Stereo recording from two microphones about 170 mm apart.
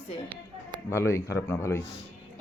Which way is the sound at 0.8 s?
15° left (ahead or behind).